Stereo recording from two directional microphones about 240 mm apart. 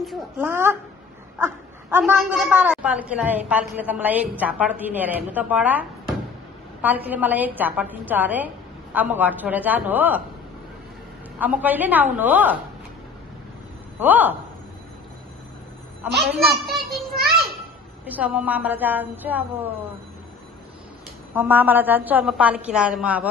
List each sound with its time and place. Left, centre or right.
0.0 s a woman's voice: centre
11.3 s a woman's voice: centre
13.9 s a woman's voice: centre
16.3 s a child's voice: centre
17.1 s a sound: right
18.0 s a woman's voice: centre
21.4 s a woman's voice: centre